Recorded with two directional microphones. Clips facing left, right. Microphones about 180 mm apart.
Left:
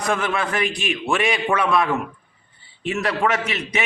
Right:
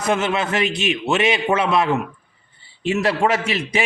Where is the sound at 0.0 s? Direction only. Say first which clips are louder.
Right 2 dB; 25° right (ahead or behind).